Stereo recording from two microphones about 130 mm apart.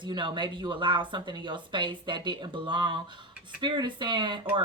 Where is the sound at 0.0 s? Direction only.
40° right (ahead or behind).